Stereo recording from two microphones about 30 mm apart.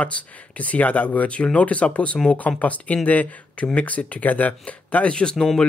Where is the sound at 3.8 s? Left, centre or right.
Left.